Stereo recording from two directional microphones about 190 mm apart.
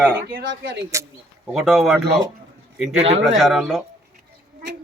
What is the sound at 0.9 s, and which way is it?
Speech, 15° right (ahead or behind).